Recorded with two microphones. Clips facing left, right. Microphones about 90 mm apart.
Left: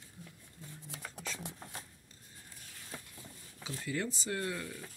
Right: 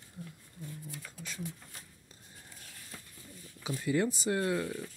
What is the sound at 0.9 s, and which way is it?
Speech, 90° left.